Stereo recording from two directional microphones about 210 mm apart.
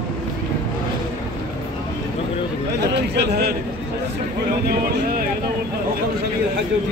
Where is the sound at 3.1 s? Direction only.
50° right (ahead or behind).